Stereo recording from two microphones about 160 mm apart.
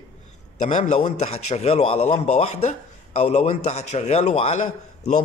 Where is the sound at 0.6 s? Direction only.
45° left (ahead or behind).